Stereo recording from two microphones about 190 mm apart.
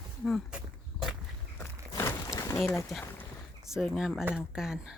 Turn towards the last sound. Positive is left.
turn(degrees=-5)  # may be behind; listen again after turning